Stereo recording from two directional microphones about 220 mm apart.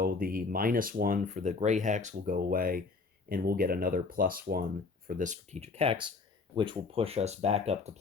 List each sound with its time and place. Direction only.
0.0 s speech: 40° right (ahead or behind)